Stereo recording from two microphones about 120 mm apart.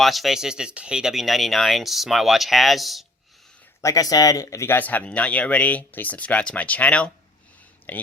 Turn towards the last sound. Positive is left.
turn(degrees=15)  # may be behind; listen again after turning